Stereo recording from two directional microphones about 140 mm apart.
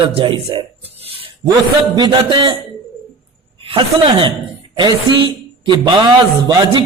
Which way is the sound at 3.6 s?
40° right (ahead or behind).